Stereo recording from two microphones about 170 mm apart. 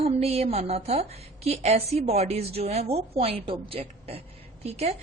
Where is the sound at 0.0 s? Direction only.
35° right (ahead or behind).